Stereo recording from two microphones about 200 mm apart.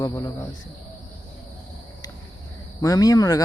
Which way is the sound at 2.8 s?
15° left (ahead or behind).